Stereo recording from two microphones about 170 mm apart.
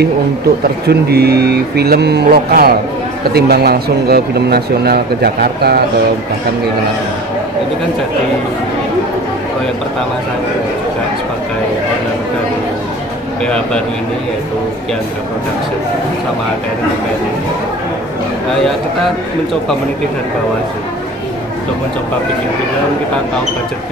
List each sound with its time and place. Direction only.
0.8 s a man's voice: 70° right (ahead or behind)